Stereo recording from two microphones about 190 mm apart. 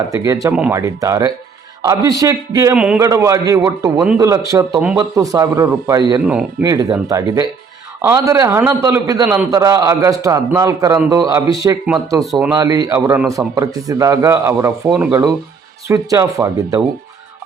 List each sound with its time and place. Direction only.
0.1 s a man's voice: 15° right (ahead or behind)
0.5 s speech: 5° right (ahead or behind)
0.8 s a man's voice: 15° right (ahead or behind)
2.7 s speech: 5° right (ahead or behind)
3.0 s a man's voice: 15° right (ahead or behind)
12.2 s speech: centre (ahead or behind)
12.5 s a man's voice: 15° right (ahead or behind)